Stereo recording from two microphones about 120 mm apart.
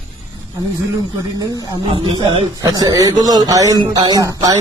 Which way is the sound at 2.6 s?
30° right (ahead or behind).